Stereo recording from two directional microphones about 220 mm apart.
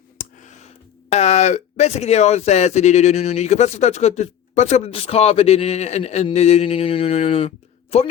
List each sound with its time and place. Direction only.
1.1 s speech: 30° left (ahead or behind)